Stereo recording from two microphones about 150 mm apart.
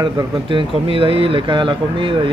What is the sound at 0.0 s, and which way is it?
Speech, 35° right (ahead or behind).